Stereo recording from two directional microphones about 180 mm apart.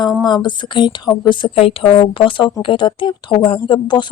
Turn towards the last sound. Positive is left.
turn(degrees=25)  # may be behind; listen again after turning